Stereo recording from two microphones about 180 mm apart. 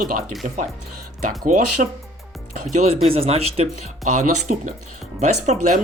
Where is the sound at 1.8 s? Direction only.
45° right (ahead or behind).